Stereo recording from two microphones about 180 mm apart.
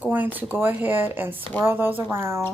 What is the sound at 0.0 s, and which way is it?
Speech, 10° right (ahead or behind).